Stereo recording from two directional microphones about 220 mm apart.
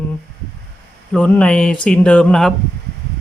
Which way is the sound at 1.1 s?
5° left (ahead or behind).